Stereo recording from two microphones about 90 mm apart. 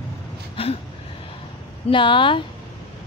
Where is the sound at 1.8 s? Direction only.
65° left (ahead or behind).